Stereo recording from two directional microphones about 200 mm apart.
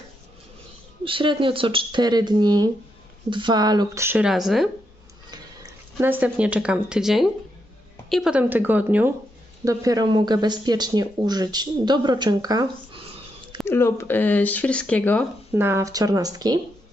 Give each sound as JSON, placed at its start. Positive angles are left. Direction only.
{"t": 1.0, "sound": "speech", "side_deg": -25}
{"t": 5.3, "sound": "speech", "side_deg": -15}
{"t": 13.7, "sound": "speech", "side_deg": 10}
{"t": 15.5, "sound": "speech", "side_deg": -10}